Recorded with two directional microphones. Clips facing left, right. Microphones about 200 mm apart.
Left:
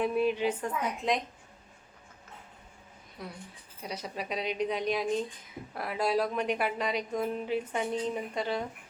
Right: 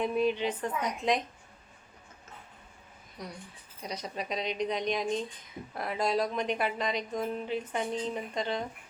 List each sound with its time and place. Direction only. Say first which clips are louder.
0.0 s a woman's voice: left 1 dB; 5° left (ahead or behind)
3.2 s a woman's voice: even; 5° left (ahead or behind)